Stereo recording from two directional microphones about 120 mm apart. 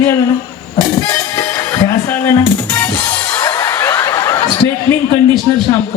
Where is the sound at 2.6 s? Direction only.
15° left (ahead or behind).